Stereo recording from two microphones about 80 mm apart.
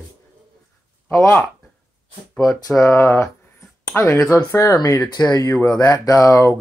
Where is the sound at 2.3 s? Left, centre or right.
Centre.